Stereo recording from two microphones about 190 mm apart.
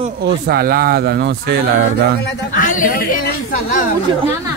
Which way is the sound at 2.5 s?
45° left (ahead or behind).